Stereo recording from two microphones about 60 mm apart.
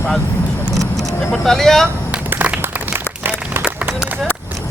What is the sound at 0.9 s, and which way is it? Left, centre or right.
Speech, centre.